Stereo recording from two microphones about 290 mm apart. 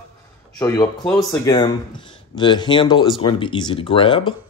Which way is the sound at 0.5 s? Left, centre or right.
Centre.